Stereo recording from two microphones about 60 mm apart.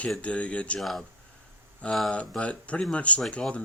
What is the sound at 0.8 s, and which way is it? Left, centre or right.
Speech, centre.